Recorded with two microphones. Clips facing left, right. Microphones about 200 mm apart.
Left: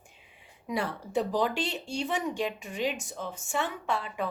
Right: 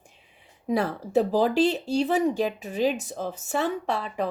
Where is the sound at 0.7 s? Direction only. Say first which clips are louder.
Right 7 dB; 40° right (ahead or behind).